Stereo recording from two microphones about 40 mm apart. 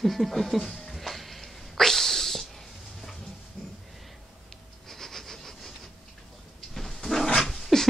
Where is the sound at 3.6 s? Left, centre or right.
Left.